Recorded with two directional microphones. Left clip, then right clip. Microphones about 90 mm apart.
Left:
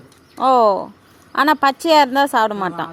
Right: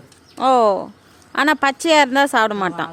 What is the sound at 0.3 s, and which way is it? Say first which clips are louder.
A woman's voice: left 1 dB; 20° right (ahead or behind).